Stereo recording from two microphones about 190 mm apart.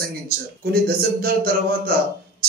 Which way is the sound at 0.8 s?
50° right (ahead or behind).